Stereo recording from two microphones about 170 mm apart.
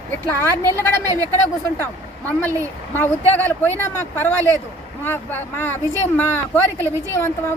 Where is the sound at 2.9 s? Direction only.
10° left (ahead or behind).